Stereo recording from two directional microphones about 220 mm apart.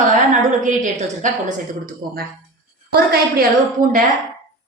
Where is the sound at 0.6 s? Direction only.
35° right (ahead or behind).